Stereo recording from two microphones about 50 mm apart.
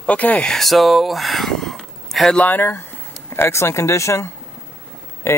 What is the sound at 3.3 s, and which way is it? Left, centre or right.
Speech, left.